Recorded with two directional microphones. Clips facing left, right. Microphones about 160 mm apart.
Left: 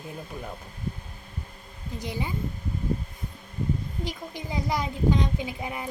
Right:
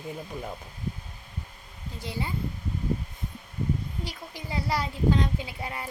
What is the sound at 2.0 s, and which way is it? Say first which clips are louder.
Speech: left 1 dB; 15° left (ahead or behind).